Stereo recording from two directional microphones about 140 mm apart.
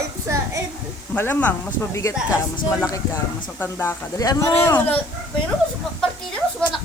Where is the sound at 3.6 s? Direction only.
15° left (ahead or behind).